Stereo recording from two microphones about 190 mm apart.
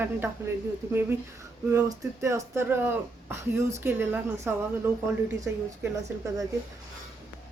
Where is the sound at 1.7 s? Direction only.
15° right (ahead or behind).